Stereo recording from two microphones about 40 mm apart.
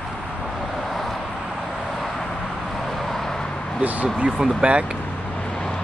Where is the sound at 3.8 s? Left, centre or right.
Right.